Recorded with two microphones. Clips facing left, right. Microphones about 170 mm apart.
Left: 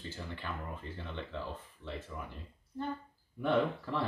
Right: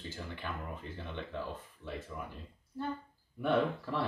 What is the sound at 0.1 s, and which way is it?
Speech, 15° right (ahead or behind).